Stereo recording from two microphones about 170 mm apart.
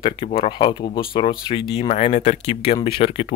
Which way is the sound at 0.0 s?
35° left (ahead or behind).